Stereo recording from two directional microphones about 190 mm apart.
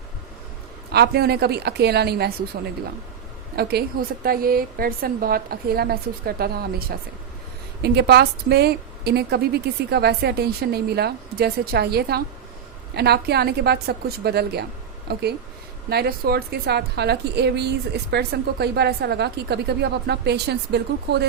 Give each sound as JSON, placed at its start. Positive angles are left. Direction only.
{"t": 0.9, "sound": "a woman's voice", "side_deg": -55}
{"t": 3.5, "sound": "a woman's voice", "side_deg": -55}